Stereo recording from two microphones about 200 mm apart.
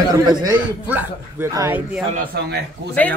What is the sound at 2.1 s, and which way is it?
Speech, 50° right (ahead or behind).